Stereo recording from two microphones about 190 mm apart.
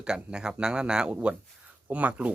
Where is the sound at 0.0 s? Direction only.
5° right (ahead or behind).